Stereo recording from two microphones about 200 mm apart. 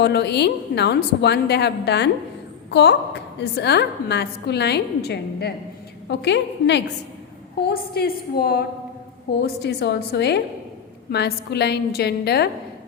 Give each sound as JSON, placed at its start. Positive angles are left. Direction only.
{"t": 0.0, "sound": "a woman's voice", "side_deg": 55}
{"t": 7.7, "sound": "a woman's voice", "side_deg": 50}